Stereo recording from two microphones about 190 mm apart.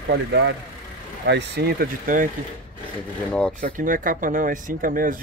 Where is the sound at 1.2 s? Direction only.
60° right (ahead or behind).